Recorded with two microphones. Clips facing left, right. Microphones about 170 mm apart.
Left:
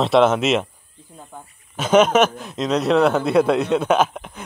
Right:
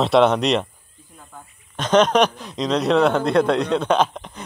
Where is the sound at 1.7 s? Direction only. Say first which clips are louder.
Left 1 dB; 5° left (ahead or behind).